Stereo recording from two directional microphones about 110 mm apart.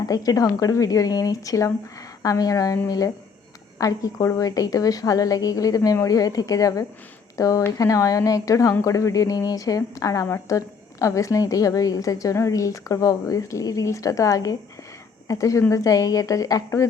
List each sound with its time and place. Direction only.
0.1 s a woman's voice: 35° left (ahead or behind)